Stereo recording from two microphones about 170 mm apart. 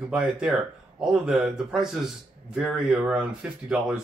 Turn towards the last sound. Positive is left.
turn(degrees=-5)  # may be behind; listen again after turning